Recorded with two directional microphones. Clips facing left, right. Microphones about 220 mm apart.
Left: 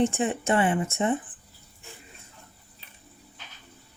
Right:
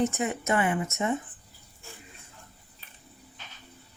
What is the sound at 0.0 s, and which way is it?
Speech, 30° left (ahead or behind).